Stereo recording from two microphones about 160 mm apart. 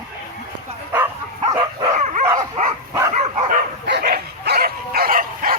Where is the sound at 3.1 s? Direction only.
45° right (ahead or behind).